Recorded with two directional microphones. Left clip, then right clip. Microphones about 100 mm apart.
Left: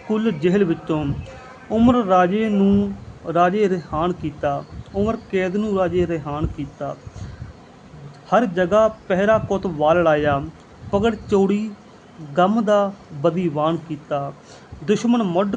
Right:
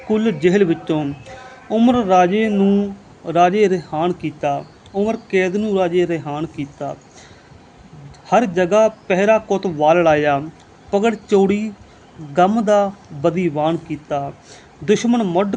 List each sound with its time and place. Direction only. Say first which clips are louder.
0.1 s speech: right 4 dB; 35° right (ahead or behind)
2.5 s a sound: right 2 dB; 20° right (ahead or behind)
3.2 s speech: right 4 dB; 35° right (ahead or behind)
8.3 s speech: right 2 dB; 35° right (ahead or behind)